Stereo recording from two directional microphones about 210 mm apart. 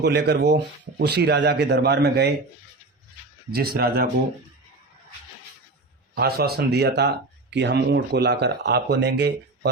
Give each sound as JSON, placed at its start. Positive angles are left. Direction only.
{"t": 0.0, "sound": "speech", "side_deg": -55}
{"t": 3.5, "sound": "speech", "side_deg": -45}
{"t": 6.1, "sound": "speech", "side_deg": -50}